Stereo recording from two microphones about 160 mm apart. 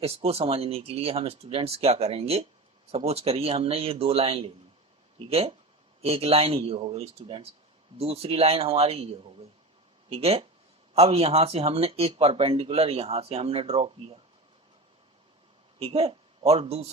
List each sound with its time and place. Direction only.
0.0 s speech: 40° right (ahead or behind)
15.8 s speech: 40° right (ahead or behind)